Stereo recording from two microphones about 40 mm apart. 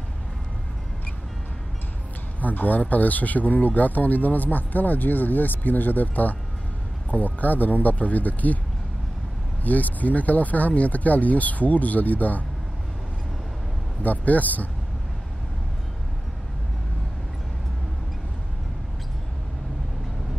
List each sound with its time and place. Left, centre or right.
2.4 s speech: left
9.6 s speech: left
14.0 s speech: left